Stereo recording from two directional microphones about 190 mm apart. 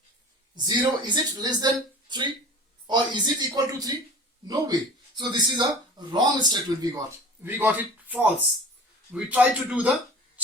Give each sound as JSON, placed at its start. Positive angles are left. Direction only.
{"t": 0.5, "sound": "speech", "side_deg": -20}